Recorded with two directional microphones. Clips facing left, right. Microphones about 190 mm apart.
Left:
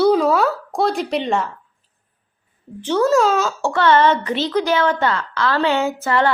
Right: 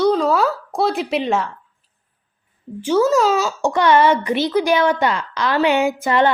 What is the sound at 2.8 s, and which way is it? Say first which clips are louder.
Speech: even; 5° right (ahead or behind).